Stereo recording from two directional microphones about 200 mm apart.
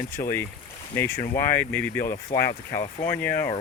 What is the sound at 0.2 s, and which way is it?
Speech, 30° left (ahead or behind).